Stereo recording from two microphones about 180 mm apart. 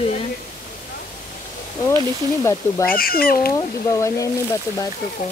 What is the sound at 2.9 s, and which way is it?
Speech, 55° left (ahead or behind).